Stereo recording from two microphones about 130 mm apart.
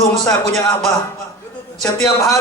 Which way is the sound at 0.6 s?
25° left (ahead or behind).